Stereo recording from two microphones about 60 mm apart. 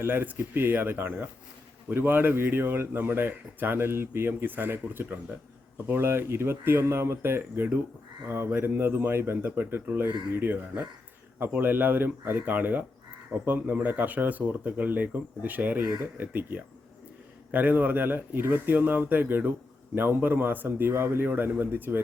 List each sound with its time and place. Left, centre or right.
0.0 s speech: right